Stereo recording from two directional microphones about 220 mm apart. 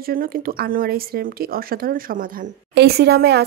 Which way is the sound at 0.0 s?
40° right (ahead or behind).